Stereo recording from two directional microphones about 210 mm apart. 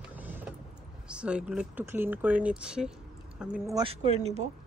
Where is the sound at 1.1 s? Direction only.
5° right (ahead or behind).